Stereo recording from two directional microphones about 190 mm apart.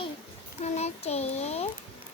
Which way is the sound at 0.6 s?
35° left (ahead or behind).